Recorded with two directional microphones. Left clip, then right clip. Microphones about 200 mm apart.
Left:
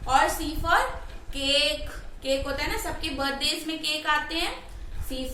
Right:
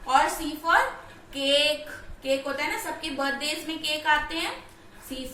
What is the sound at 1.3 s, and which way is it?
A woman's voice, 20° left (ahead or behind).